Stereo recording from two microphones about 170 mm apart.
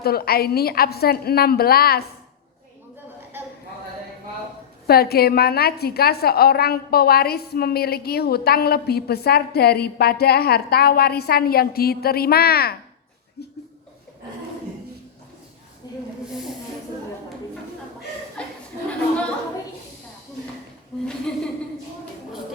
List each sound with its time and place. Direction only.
0.0 s a woman's voice: 65° left (ahead or behind)
4.9 s a woman's voice: 65° left (ahead or behind)
15.8 s snake: 20° left (ahead or behind)
16.2 s hiss: 5° right (ahead or behind)
18.4 s chuckle: 5° left (ahead or behind)
18.9 s a sound: 5° left (ahead or behind)
20.9 s a sound: centre (ahead or behind)